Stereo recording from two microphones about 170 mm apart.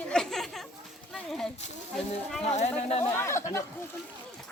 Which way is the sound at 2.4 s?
40° left (ahead or behind).